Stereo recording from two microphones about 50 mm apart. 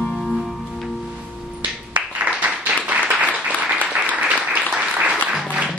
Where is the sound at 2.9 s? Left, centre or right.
Right.